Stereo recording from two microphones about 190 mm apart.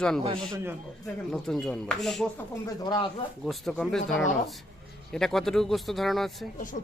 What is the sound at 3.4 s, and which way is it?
Speech, centre (ahead or behind).